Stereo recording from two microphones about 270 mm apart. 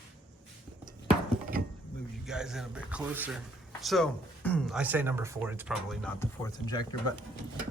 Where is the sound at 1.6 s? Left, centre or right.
Right.